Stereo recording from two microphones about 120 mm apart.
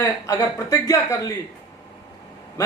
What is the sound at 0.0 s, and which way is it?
A man's voice, 30° left (ahead or behind).